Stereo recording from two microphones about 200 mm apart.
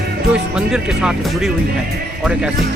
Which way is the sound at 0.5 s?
5° right (ahead or behind).